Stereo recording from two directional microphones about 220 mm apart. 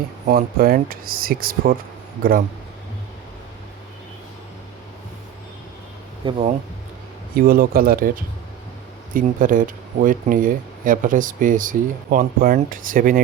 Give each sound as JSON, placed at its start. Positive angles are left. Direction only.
{"t": 0.3, "sound": "speech", "side_deg": -40}
{"t": 6.2, "sound": "speech", "side_deg": -25}
{"t": 7.3, "sound": "speech", "side_deg": -40}